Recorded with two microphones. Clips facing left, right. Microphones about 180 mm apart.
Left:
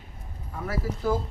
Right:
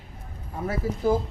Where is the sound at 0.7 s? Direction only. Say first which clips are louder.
Right 3 dB; 20° right (ahead or behind).